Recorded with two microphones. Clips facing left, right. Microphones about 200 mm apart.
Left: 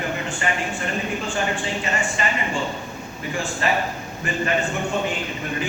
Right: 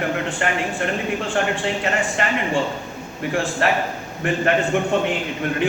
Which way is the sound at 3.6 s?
75° right (ahead or behind).